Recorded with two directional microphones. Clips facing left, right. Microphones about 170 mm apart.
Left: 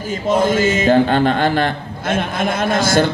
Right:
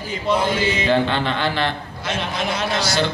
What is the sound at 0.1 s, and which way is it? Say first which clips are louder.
A man's voice: left 5 dB; 45° left (ahead or behind).